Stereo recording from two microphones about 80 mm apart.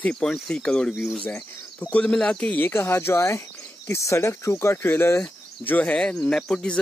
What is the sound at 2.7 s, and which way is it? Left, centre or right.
Speech, left.